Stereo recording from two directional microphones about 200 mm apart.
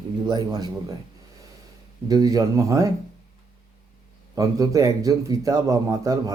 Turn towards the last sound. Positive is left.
turn(degrees=-15)  # may be behind; listen again after turning